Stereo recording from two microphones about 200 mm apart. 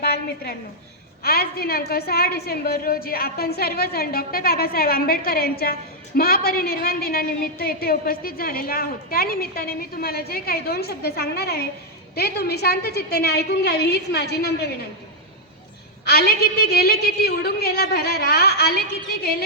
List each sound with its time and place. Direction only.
0.0 s a woman's voice: 55° left (ahead or behind)
16.0 s a woman's voice: 55° left (ahead or behind)